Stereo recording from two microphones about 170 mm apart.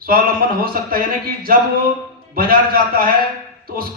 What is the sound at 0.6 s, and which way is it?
A man's voice, 60° right (ahead or behind).